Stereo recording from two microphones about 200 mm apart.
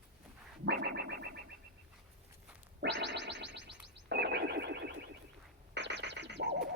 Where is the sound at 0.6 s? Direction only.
55° right (ahead or behind).